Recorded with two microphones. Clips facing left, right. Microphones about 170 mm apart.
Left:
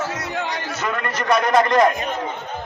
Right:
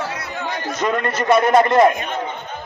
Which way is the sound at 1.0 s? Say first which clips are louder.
Right 3 dB; 30° right (ahead or behind).